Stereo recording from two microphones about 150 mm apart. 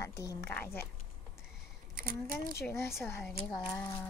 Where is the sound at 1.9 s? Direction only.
70° right (ahead or behind).